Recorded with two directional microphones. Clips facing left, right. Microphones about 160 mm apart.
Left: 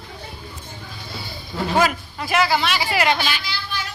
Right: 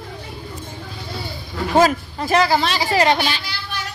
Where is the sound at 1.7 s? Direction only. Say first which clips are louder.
Right 5 dB; 40° right (ahead or behind).